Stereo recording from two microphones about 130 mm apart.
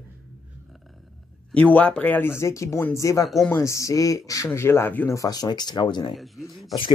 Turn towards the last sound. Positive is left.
turn(degrees=0)  # may be behind; listen again after turning